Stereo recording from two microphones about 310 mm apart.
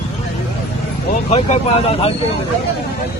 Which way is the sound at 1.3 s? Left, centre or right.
Left.